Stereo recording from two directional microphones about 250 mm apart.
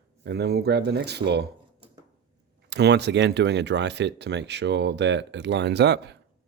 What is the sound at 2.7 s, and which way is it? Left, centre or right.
Speech, right.